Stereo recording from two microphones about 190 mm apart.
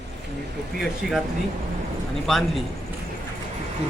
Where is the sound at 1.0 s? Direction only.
Centre (ahead or behind).